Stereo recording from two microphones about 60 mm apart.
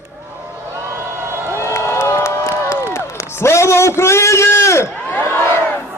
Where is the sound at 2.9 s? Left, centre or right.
Left.